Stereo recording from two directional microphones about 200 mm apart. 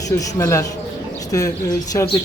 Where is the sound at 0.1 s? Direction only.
15° left (ahead or behind).